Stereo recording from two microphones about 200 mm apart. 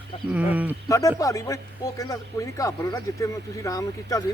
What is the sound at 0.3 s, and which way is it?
Speech, 10° right (ahead or behind).